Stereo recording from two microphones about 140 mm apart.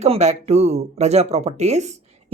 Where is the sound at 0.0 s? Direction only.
50° right (ahead or behind).